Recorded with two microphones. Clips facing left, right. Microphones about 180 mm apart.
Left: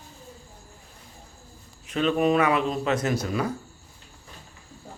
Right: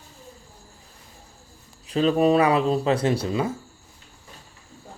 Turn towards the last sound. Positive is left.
turn(degrees=-25)  # may be behind; listen again after turning